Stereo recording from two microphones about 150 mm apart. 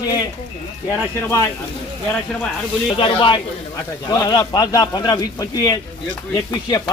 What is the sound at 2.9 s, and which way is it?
A man's voice, 35° left (ahead or behind).